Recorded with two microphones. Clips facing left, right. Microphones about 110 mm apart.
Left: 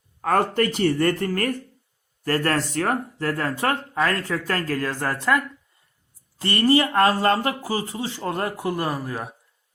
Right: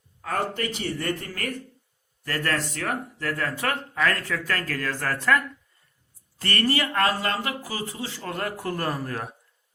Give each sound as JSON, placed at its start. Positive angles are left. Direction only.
{"t": 0.2, "sound": "speech", "side_deg": 50}
{"t": 6.4, "sound": "speech", "side_deg": 20}